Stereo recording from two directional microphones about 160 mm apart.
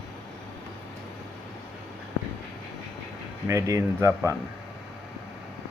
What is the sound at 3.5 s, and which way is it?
Speech, 20° right (ahead or behind).